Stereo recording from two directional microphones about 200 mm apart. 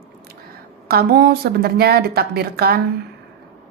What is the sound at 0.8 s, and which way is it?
Speech, 50° right (ahead or behind).